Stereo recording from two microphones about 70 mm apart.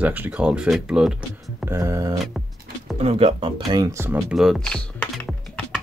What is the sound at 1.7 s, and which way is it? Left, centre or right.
Speech, right.